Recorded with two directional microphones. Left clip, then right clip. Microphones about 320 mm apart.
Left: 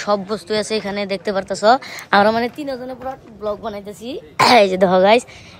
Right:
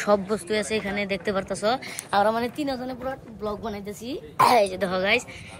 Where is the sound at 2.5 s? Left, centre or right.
Centre.